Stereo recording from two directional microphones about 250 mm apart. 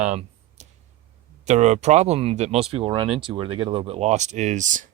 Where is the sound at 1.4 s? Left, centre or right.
Right.